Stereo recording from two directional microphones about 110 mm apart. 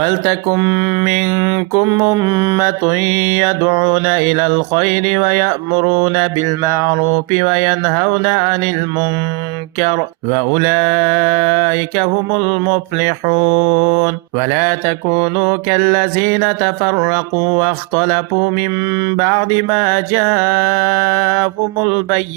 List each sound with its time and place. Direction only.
0.0 s mantra: 30° right (ahead or behind)
2.3 s mantra: 50° right (ahead or behind)
2.6 s mantra: 25° right (ahead or behind)
3.7 s mantra: 55° right (ahead or behind)
4.8 s mantra: 30° right (ahead or behind)
10.3 s mantra: 25° right (ahead or behind)
15.1 s mantra: 25° right (ahead or behind)
17.5 s mantra: 25° right (ahead or behind)
20.3 s mantra: 25° right (ahead or behind)